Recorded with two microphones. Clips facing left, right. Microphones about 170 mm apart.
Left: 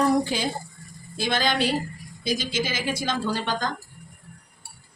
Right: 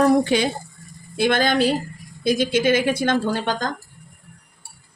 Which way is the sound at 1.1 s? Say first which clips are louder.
Right 6 dB; 60° right (ahead or behind).